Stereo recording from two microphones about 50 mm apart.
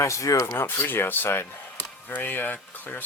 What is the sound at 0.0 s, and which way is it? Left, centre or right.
Speech, left.